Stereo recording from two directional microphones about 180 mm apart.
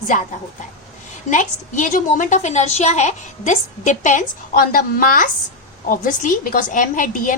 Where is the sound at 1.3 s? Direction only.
45° left (ahead or behind).